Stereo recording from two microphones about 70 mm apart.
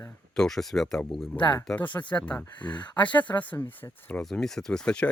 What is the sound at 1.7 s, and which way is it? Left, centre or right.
Speech, left.